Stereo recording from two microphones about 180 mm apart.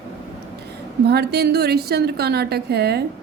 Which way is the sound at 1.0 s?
65° right (ahead or behind).